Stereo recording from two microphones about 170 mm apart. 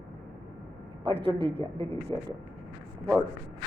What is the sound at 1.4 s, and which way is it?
Speech, 35° right (ahead or behind).